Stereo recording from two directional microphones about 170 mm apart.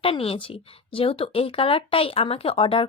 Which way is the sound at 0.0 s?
35° left (ahead or behind).